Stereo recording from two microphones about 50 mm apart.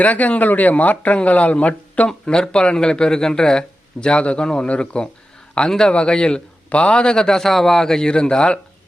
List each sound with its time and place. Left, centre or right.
0.0 s speech: left
2.0 s a man's voice: centre